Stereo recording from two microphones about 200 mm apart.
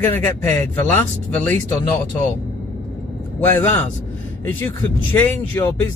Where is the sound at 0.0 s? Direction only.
10° left (ahead or behind).